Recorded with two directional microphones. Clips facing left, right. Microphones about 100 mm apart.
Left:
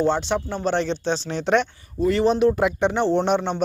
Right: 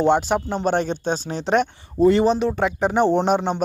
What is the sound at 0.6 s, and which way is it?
Speech, 50° right (ahead or behind).